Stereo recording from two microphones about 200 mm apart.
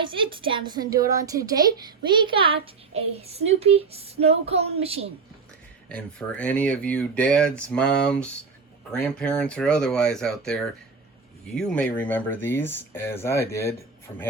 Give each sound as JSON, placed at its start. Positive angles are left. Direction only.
{"t": 0.0, "sound": "a woman's voice", "side_deg": -25}
{"t": 5.9, "sound": "speech", "side_deg": 5}